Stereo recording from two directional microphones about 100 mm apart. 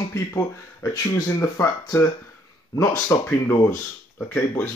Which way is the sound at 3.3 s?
20° left (ahead or behind).